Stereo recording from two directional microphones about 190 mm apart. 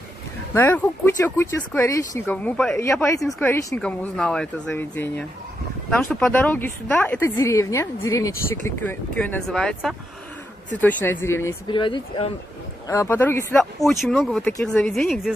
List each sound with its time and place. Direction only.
0.6 s a woman's voice: 10° left (ahead or behind)
2.8 s a woman's voice: 15° left (ahead or behind)
3.2 s a woman's voice: centre (ahead or behind)
11.7 s speech: 25° left (ahead or behind)
12.8 s a woman's voice: 15° left (ahead or behind)
13.8 s speech: centre (ahead or behind)